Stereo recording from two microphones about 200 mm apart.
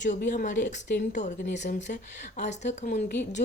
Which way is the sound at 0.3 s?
40° left (ahead or behind).